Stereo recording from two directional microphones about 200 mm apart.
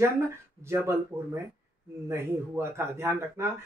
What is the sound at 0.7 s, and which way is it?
Speech, 15° right (ahead or behind).